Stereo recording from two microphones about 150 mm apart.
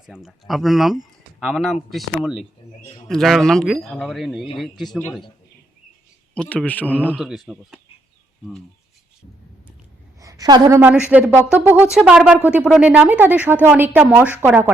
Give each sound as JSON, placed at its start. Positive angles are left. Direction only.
{"t": 0.0, "sound": "speech", "side_deg": -5}
{"t": 6.3, "sound": "a man's voice", "side_deg": 5}
{"t": 7.2, "sound": "speech", "side_deg": -5}
{"t": 10.2, "sound": "a sound", "side_deg": -25}
{"t": 10.8, "sound": "speech", "side_deg": -10}